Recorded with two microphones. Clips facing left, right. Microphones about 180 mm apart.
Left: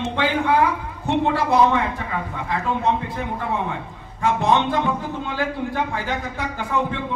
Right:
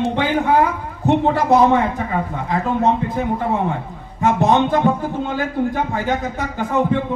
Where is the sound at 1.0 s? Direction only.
45° right (ahead or behind).